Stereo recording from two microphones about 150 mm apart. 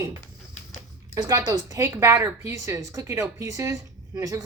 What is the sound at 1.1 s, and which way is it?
A woman's voice, 25° right (ahead or behind).